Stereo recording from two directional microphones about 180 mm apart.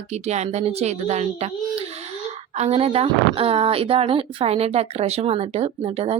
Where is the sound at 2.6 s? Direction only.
35° right (ahead or behind).